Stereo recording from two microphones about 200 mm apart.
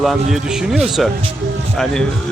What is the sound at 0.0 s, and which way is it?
A man's voice, centre (ahead or behind).